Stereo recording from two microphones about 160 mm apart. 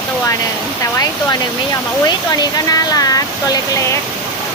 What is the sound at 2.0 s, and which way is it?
Speech, 25° left (ahead or behind).